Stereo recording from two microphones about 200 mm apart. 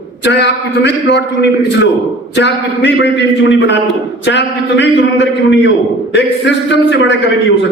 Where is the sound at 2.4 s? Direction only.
60° left (ahead or behind).